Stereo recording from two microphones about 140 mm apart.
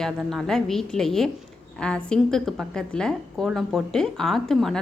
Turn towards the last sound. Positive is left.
turn(degrees=5)  # may be behind; listen again after turning